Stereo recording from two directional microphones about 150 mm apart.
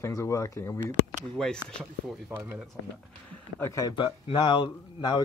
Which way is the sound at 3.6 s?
20° left (ahead or behind).